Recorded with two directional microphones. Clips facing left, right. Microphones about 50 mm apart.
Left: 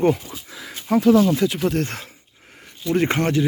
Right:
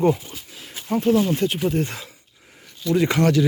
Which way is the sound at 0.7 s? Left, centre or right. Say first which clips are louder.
Left 4 dB; left.